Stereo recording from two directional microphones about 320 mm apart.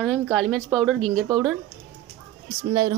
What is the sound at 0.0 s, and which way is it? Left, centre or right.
A woman's voice, centre.